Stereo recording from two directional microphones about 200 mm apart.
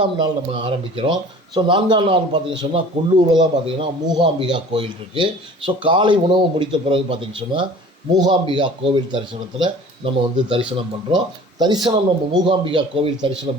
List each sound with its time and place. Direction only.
0.0 s speech: 25° right (ahead or behind)
11.6 s speech: 20° right (ahead or behind)